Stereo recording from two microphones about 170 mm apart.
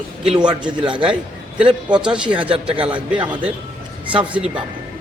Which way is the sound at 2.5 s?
30° right (ahead or behind).